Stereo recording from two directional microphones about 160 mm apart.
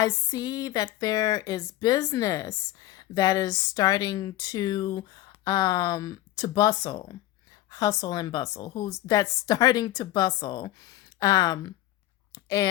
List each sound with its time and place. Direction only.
0.0 s speech: 20° left (ahead or behind)
12.3 s chewing: 20° left (ahead or behind)